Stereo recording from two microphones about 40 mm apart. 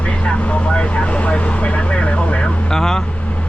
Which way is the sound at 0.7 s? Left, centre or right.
Left.